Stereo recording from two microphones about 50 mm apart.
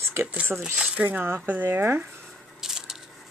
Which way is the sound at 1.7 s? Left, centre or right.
Right.